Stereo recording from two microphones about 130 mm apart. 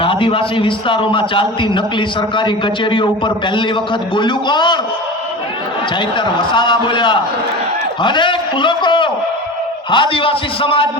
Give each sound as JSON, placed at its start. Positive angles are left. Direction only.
{"t": 0.0, "sound": "a man's voice", "side_deg": 45}
{"t": 6.1, "sound": "a man's voice", "side_deg": 35}